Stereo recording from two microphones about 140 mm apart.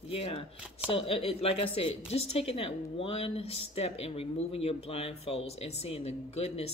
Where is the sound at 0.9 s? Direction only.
45° left (ahead or behind).